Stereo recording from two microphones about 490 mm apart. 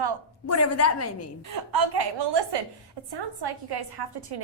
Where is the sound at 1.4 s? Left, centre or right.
Right.